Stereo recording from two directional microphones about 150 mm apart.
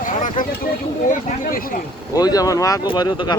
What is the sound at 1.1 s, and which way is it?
Speech, 65° left (ahead or behind).